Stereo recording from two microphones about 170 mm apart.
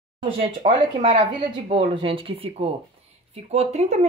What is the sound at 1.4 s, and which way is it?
Speech, 35° right (ahead or behind).